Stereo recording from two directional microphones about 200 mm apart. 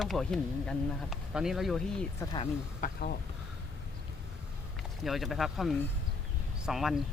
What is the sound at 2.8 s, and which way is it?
Speech, 50° left (ahead or behind).